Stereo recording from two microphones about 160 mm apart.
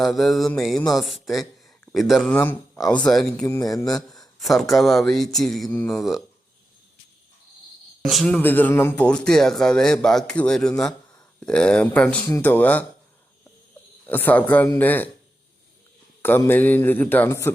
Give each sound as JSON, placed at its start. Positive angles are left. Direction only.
{"t": 0.0, "sound": "speech", "side_deg": 0}
{"t": 2.3, "sound": "speech", "side_deg": 15}
{"t": 2.9, "sound": "speech", "side_deg": 5}
{"t": 3.4, "sound": "a man's voice", "side_deg": 20}
{"t": 3.8, "sound": "speech", "side_deg": 5}
{"t": 8.0, "sound": "speech", "side_deg": 5}
{"t": 14.1, "sound": "speech", "side_deg": 10}
{"t": 16.4, "sound": "speech", "side_deg": 10}